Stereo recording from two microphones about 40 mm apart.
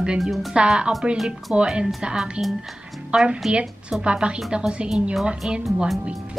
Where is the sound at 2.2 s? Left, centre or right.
Centre.